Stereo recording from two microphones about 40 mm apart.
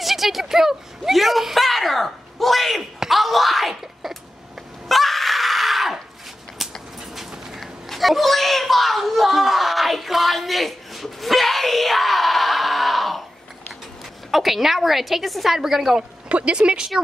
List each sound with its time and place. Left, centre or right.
0.0 s a woman's voice: centre
1.1 s speech: centre
4.8 s screaming: centre
7.2 s a sound: centre
7.6 s screaming: centre
14.3 s a woman's voice: centre
16.0 s speech: right